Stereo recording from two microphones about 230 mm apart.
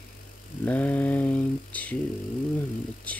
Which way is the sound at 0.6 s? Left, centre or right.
Centre.